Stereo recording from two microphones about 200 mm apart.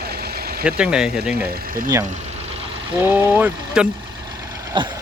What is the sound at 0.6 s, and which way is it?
Speech, 5° right (ahead or behind).